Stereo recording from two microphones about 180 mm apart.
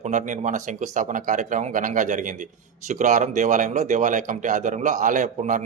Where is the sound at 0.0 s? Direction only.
45° right (ahead or behind).